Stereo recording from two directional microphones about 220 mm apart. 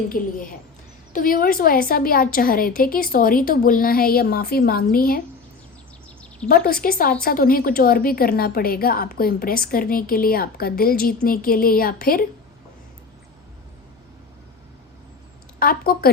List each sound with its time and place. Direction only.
0.1 s a woman's voice: 40° left (ahead or behind)
6.5 s a woman's voice: 40° left (ahead or behind)
15.5 s a woman's voice: 40° left (ahead or behind)